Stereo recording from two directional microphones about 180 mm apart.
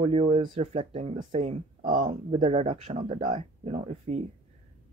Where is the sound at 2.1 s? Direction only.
35° right (ahead or behind).